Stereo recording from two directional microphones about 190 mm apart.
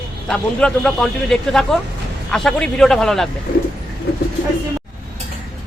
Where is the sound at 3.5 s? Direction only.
50° left (ahead or behind).